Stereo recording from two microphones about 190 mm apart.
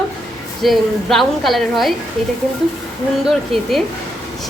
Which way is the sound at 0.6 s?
Centre (ahead or behind).